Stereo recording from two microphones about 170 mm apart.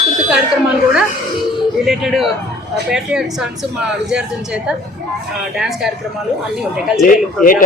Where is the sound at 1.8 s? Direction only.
5° right (ahead or behind).